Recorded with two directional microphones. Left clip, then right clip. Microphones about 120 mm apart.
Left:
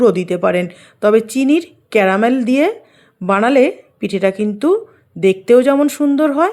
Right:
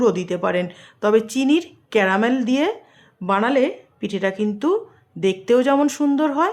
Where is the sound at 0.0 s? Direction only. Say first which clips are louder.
Left 6 dB; 35° left (ahead or behind).